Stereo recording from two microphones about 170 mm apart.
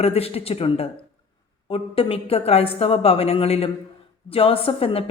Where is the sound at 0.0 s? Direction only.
35° left (ahead or behind).